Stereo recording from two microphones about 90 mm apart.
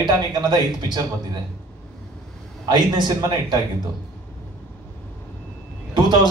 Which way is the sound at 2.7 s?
55° right (ahead or behind).